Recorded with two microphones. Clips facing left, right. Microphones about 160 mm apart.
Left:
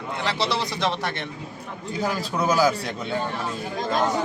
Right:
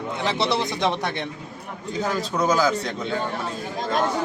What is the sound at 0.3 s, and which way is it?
Speech, 20° right (ahead or behind).